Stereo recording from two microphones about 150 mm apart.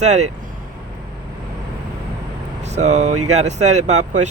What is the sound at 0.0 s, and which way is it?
Speech, 50° right (ahead or behind).